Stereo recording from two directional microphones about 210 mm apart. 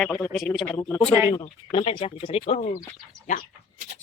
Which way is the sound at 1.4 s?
25° left (ahead or behind).